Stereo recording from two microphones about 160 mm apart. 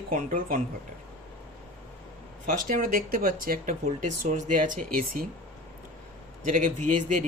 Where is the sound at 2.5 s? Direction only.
55° right (ahead or behind).